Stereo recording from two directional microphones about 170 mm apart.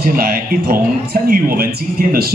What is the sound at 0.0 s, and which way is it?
A man's voice, 60° right (ahead or behind).